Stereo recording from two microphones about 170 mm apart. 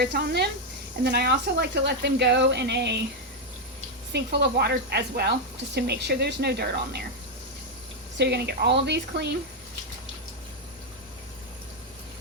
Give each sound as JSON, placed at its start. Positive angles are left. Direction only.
{"t": 0.0, "sound": "a woman's voice", "side_deg": -70}
{"t": 4.1, "sound": "a woman's voice", "side_deg": -80}
{"t": 8.2, "sound": "speech", "side_deg": -75}